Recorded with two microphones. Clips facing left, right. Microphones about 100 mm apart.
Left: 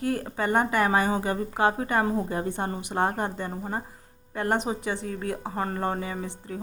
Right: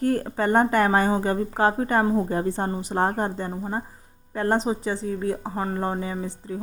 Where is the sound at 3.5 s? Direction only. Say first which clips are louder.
Right 3 dB; 20° right (ahead or behind).